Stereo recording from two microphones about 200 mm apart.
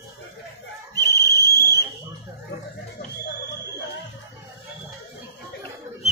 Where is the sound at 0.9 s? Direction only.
15° left (ahead or behind).